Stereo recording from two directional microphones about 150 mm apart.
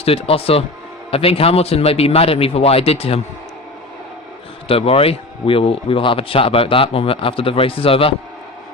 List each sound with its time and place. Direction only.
0.0 s speech: 40° left (ahead or behind)
4.7 s speech: 40° left (ahead or behind)